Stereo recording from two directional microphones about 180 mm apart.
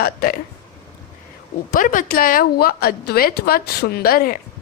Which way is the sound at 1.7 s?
50° left (ahead or behind).